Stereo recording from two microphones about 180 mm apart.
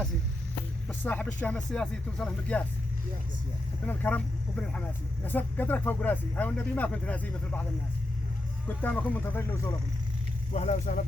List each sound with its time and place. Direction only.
0.9 s speech: 10° left (ahead or behind)
3.8 s speech: 10° left (ahead or behind)
8.6 s speech: 10° left (ahead or behind)
10.5 s speech: 40° left (ahead or behind)